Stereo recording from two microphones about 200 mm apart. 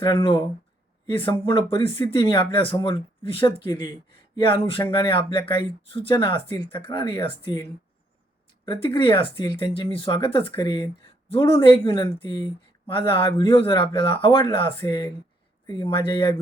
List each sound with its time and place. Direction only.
0.0 s speech: 20° left (ahead or behind)
12.9 s speech: 25° left (ahead or behind)